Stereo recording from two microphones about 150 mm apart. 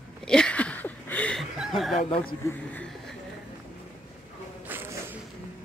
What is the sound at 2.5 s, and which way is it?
Speech, 10° left (ahead or behind).